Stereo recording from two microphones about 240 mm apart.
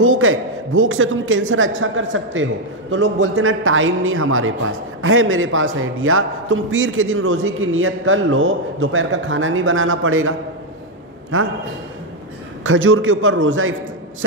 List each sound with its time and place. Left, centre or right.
0.0 s a man's voice: right
11.3 s a man's voice: right
12.6 s a man's voice: right